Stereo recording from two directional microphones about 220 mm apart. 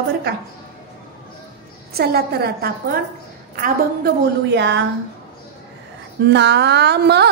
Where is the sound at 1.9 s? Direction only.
45° right (ahead or behind).